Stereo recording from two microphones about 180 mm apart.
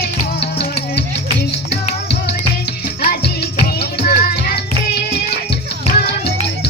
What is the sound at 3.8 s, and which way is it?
Music, 60° left (ahead or behind).